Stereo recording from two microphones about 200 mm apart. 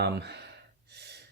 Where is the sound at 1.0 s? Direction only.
55° right (ahead or behind).